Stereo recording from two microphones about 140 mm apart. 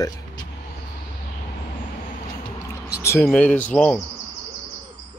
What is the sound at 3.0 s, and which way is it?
Speech, 20° left (ahead or behind).